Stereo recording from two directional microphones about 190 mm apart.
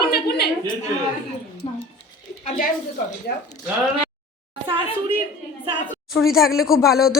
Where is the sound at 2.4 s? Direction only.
40° left (ahead or behind).